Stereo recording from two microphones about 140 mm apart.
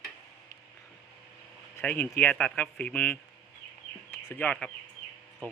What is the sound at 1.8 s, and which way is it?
Speech, 10° left (ahead or behind).